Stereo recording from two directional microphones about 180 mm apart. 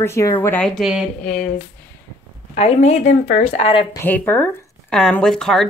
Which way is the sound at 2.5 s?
35° left (ahead or behind).